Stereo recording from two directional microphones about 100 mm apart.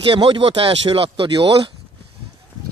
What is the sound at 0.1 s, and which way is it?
Speech, 65° right (ahead or behind).